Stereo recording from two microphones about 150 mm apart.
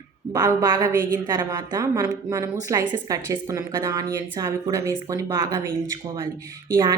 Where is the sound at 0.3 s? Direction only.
25° right (ahead or behind).